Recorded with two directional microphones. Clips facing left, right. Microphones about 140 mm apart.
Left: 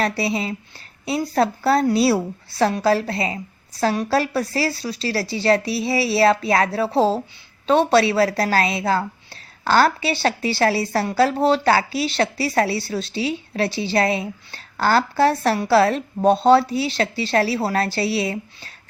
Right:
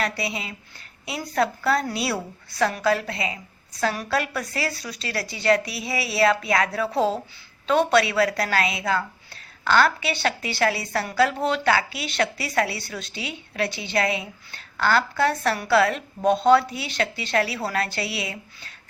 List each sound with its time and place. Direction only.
0.0 s a woman's voice: 35° left (ahead or behind)